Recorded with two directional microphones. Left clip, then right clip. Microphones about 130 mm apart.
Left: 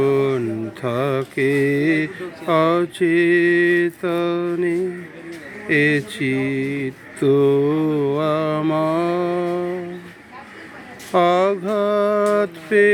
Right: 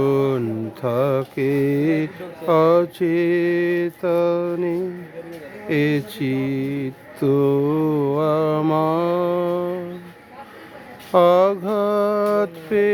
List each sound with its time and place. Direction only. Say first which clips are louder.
0.0 s mantra: left 1 dB; 40° right (ahead or behind)
11.1 s speech: right 2 dB; 40° right (ahead or behind)
11.6 s music: left 1 dB; 35° right (ahead or behind)
12.1 s mantra: left 2 dB; 20° right (ahead or behind)